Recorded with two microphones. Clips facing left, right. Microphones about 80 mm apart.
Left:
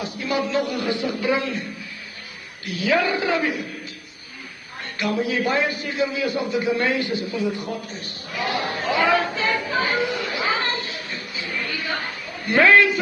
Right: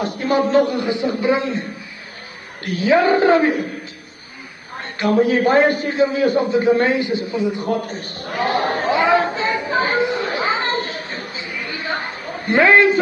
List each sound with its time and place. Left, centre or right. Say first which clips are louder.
0.0 s a man's voice: right 6 dB; right
0.7 s a man's voice: right 4 dB; right
2.6 s a man's voice: right 6 dB; right
4.7 s a man's voice: right 8 dB; right
7.6 s a man's voice: right 8 dB; right
8.9 s chatter: right 3 dB; right
10.8 s children playing: right 6 dB; right
11.3 s chatter: right 1 dB; centre
12.3 s a sound: right 7 dB; right
12.5 s a man's voice: right 3 dB; right